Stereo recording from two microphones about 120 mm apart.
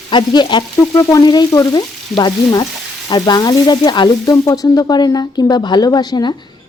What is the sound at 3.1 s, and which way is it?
Frying, 35° left (ahead or behind).